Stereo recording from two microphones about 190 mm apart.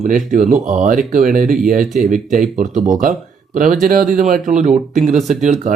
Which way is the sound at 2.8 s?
40° right (ahead or behind).